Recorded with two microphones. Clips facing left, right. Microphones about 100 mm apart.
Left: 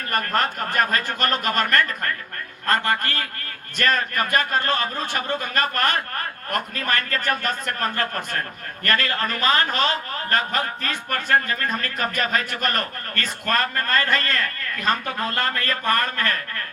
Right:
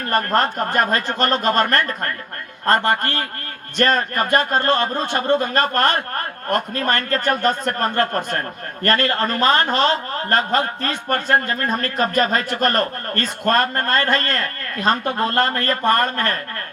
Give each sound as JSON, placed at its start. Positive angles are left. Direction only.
{"t": 0.1, "sound": "a man's voice", "side_deg": -30}